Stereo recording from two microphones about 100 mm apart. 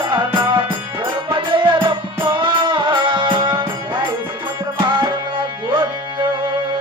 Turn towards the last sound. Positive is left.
turn(degrees=-50)  # may be behind; listen again after turning